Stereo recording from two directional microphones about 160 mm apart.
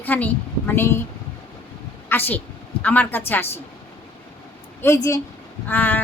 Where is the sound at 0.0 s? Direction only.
10° left (ahead or behind).